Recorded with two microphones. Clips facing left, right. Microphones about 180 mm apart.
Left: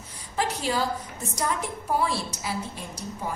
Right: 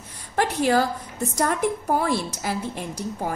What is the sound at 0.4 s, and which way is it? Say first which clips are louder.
Speech: right 6 dB; 60° right (ahead or behind).